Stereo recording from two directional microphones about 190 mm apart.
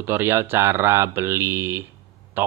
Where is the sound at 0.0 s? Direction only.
10° right (ahead or behind).